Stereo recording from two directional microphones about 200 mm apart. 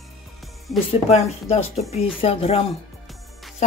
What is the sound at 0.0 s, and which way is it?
Music, centre (ahead or behind).